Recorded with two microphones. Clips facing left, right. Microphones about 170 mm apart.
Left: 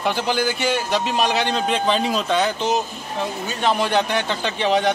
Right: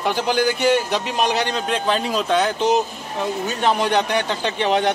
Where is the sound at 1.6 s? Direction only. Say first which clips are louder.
Left 1 dB; 5° right (ahead or behind).